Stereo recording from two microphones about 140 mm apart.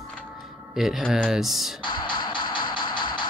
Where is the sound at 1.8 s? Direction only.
35° left (ahead or behind).